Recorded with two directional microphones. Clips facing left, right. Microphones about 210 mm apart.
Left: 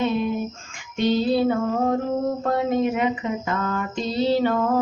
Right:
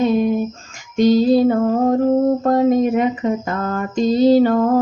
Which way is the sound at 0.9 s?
40° right (ahead or behind).